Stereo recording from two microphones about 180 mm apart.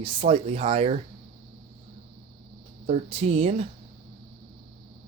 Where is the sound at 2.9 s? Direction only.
35° right (ahead or behind).